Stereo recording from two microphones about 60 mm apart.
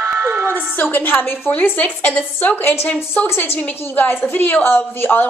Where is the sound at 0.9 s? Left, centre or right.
Left.